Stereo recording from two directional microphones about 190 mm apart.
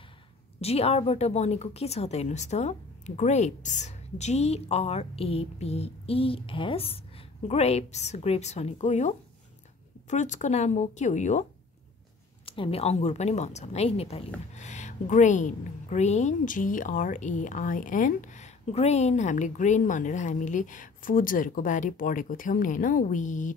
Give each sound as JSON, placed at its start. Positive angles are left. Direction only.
{"t": 0.6, "sound": "a woman's voice", "side_deg": 30}
{"t": 12.4, "sound": "a woman's voice", "side_deg": 30}